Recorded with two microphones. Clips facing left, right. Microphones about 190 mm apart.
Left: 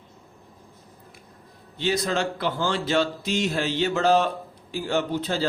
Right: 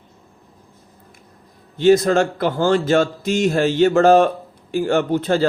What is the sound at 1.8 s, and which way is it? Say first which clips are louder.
Speech: right 11 dB; 50° right (ahead or behind).